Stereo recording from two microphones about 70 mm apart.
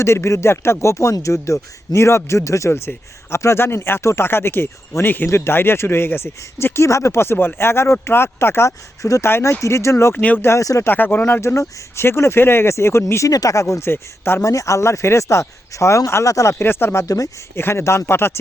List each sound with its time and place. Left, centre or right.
0.0 s speech: left
9.0 s speech: left
10.2 s speech: left
10.6 s speech: left
10.8 s speech: left
11.3 s speech: left
13.2 s speech: left
14.4 s speech: left
16.6 s speech: left